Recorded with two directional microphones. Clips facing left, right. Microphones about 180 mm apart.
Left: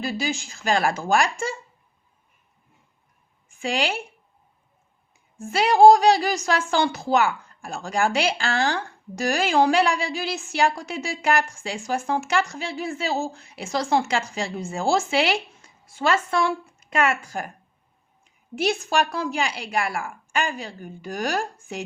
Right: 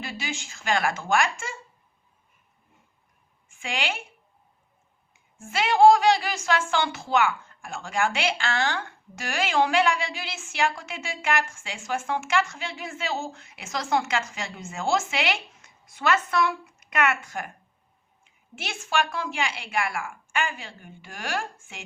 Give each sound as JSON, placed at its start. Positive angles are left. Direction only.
{"t": 0.0, "sound": "a woman's voice", "side_deg": 35}
{"t": 3.5, "sound": "a woman's voice", "side_deg": 35}
{"t": 5.4, "sound": "a woman's voice", "side_deg": 35}
{"t": 18.5, "sound": "a woman's voice", "side_deg": 35}